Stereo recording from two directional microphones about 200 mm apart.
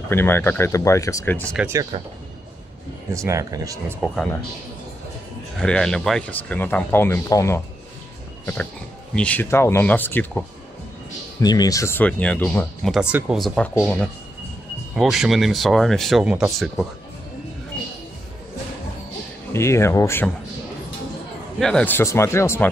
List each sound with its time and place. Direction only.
0.1 s speech: 10° left (ahead or behind)
1.6 s speech: 15° right (ahead or behind)
3.1 s speech: 15° right (ahead or behind)
4.0 s speech: 5° left (ahead or behind)
5.6 s speech: 5° left (ahead or behind)
9.1 s speech: 5° left (ahead or behind)
11.4 s speech: 20° left (ahead or behind); by 16.8 s centre (ahead or behind)
19.5 s speech: 15° left (ahead or behind)
21.5 s speech: 5° left (ahead or behind)